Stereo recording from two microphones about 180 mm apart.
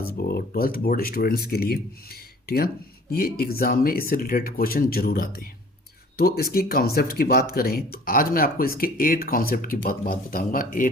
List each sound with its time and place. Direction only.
0.0 s speech: 55° left (ahead or behind)